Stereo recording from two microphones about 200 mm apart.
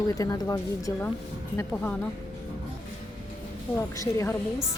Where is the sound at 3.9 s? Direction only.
15° left (ahead or behind).